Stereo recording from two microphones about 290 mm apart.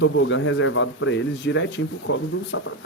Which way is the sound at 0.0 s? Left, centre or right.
Left.